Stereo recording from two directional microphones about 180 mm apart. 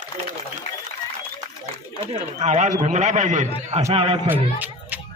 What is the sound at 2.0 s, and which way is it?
A man's voice, 40° right (ahead or behind).